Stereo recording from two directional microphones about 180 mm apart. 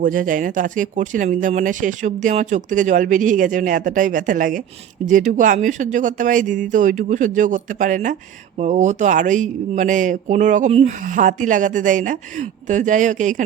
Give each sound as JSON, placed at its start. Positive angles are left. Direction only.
{"t": 0.0, "sound": "speech", "side_deg": -50}